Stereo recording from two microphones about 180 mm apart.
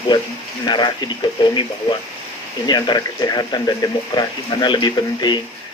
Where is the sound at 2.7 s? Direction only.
25° left (ahead or behind).